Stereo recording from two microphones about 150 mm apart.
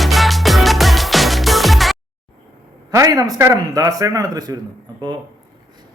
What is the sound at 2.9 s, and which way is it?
Speech, 20° right (ahead or behind).